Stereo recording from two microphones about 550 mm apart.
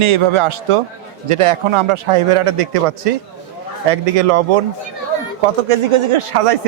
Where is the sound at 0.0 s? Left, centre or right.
Right.